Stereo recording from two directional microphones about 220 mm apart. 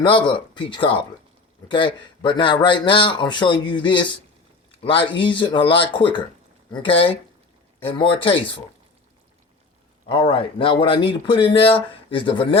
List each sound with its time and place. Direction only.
0.0 s speech: 20° left (ahead or behind)
10.1 s speech: 25° left (ahead or behind)